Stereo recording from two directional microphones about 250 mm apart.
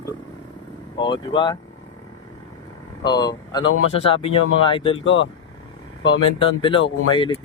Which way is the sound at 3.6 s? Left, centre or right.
Left.